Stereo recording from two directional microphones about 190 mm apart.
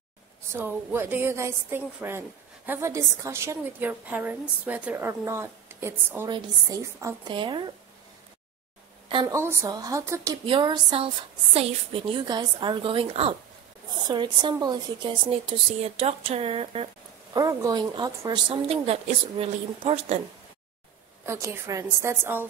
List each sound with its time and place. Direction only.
0.5 s a woman's voice: 10° right (ahead or behind)
9.1 s a woman's voice: 25° right (ahead or behind)
10.4 s speech: 25° right (ahead or behind)
21.3 s a woman's voice: 15° right (ahead or behind)